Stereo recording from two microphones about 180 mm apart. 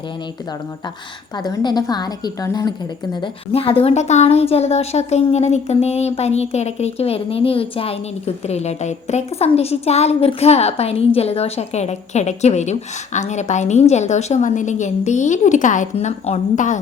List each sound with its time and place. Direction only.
1.5 s a woman's voice: 20° left (ahead or behind); by 16.8 s 45° left (ahead or behind)